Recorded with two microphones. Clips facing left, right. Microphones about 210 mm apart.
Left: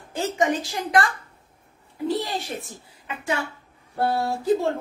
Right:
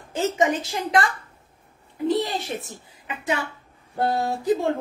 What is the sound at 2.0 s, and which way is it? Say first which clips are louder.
A child's voice: right 3 dB; 20° right (ahead or behind).